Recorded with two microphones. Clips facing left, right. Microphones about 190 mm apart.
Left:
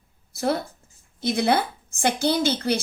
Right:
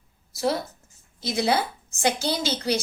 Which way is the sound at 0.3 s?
55° left (ahead or behind).